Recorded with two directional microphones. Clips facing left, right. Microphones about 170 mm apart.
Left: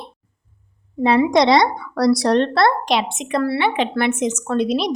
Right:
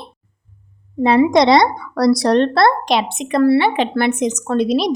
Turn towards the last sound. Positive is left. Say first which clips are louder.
# right 3 dB
turn(degrees=-40)  # may be behind; listen again after turning